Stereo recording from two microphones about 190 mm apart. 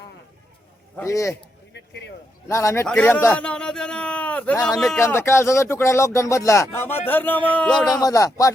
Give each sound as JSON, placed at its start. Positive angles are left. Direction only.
{"t": 0.9, "sound": "speech", "side_deg": 15}
{"t": 1.7, "sound": "a sound", "side_deg": 65}
{"t": 2.5, "sound": "speech", "side_deg": 15}
{"t": 4.9, "sound": "speech", "side_deg": 15}
{"t": 7.9, "sound": "speech", "side_deg": 20}